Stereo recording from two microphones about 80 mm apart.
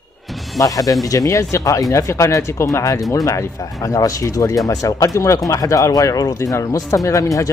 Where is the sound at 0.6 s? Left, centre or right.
Left.